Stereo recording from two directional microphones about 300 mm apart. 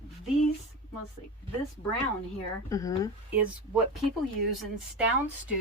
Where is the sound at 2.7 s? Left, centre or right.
Centre.